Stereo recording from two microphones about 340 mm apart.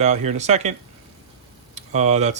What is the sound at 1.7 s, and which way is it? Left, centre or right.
Speech, centre.